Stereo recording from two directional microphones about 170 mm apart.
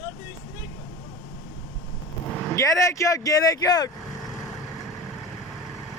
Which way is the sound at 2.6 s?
20° left (ahead or behind).